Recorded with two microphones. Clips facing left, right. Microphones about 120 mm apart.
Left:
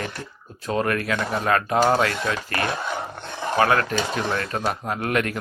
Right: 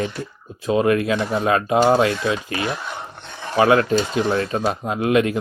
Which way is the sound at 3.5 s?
20° right (ahead or behind).